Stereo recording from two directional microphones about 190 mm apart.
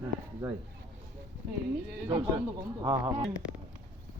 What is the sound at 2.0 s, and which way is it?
Speech, 20° right (ahead or behind).